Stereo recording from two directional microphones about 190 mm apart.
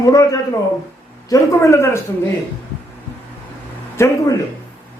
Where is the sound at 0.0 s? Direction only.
20° left (ahead or behind).